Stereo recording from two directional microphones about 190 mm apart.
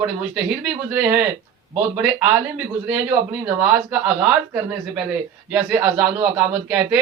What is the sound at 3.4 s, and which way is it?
A woman's voice, 10° right (ahead or behind).